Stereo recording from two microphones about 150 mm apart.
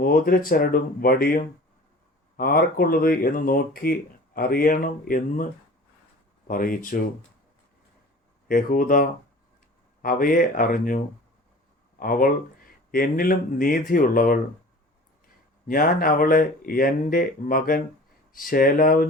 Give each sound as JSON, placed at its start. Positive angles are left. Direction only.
{"t": 0.0, "sound": "speech", "side_deg": 75}
{"t": 6.5, "sound": "speech", "side_deg": 70}
{"t": 8.4, "sound": "speech", "side_deg": 70}
{"t": 11.9, "sound": "speech", "side_deg": 70}
{"t": 15.6, "sound": "speech", "side_deg": 70}